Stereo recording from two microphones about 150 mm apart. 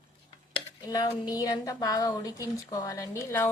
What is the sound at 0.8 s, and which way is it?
A woman's voice, 25° left (ahead or behind).